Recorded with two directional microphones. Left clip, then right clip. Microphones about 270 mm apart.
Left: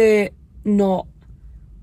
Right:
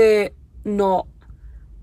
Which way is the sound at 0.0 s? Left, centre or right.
Centre.